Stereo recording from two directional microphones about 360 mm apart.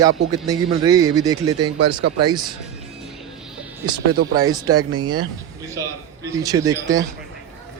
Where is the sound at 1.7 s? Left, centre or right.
Right.